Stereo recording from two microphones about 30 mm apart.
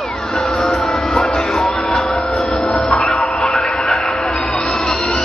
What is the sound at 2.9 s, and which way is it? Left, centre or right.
Music, left.